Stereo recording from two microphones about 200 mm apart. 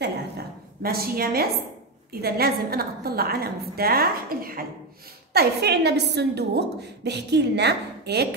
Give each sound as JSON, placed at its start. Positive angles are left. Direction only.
{"t": 0.8, "sound": "a woman's voice", "side_deg": -50}